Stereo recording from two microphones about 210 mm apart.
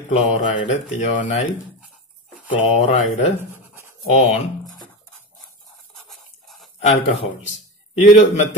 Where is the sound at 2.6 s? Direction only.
35° left (ahead or behind).